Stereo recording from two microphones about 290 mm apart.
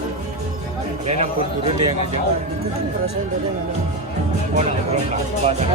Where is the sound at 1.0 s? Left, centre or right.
Right.